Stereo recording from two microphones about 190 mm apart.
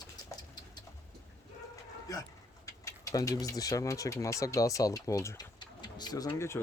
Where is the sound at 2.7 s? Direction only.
15° left (ahead or behind).